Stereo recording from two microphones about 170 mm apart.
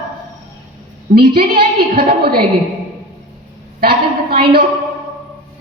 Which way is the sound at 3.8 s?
60° right (ahead or behind).